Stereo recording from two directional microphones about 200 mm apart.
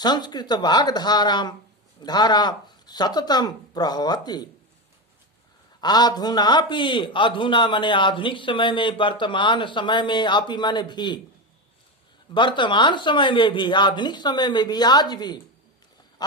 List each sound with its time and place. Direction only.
0.0 s a man's voice: 20° left (ahead or behind)
5.8 s a man's voice: 20° left (ahead or behind)
12.3 s a man's voice: 25° left (ahead or behind)